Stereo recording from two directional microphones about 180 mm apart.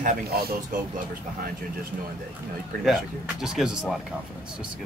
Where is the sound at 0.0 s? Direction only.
55° right (ahead or behind).